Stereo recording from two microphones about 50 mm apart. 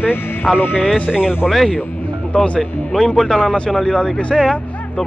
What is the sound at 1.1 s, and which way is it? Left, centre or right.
Speech, centre.